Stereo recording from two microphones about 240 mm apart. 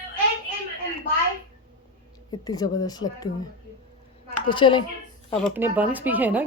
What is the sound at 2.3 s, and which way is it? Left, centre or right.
Speech, centre.